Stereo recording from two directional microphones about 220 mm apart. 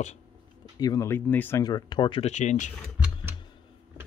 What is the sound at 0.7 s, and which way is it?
Speech, 15° left (ahead or behind).